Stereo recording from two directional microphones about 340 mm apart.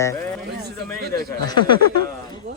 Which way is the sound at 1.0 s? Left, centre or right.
Right.